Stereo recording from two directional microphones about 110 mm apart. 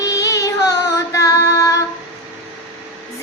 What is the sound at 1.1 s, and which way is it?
Music, 30° left (ahead or behind).